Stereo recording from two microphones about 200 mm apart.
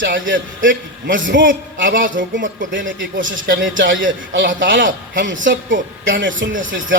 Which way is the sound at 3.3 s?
45° right (ahead or behind).